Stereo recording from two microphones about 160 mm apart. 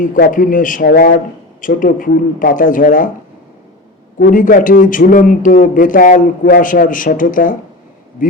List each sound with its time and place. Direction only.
0.0 s speech: 55° left (ahead or behind)
1.6 s speech: 60° left (ahead or behind)
4.2 s speech: 60° left (ahead or behind)